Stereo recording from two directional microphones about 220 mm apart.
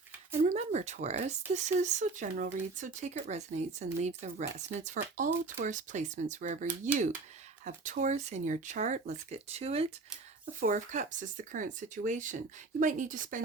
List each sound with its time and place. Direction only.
0.3 s speech: 30° right (ahead or behind)